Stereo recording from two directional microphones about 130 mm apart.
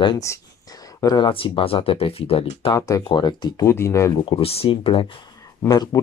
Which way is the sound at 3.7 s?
20° left (ahead or behind).